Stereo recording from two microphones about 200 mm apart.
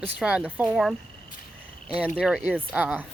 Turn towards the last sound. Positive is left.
turn(degrees=-5)  # may be behind; listen again after turning